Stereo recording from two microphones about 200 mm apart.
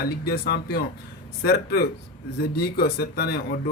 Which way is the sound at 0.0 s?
50° left (ahead or behind).